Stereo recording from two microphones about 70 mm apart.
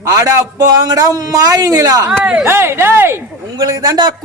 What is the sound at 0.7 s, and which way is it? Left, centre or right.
A man's voice, right.